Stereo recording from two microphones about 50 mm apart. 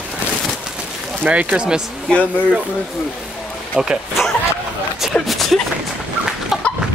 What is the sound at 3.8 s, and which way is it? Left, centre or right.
Speech, centre.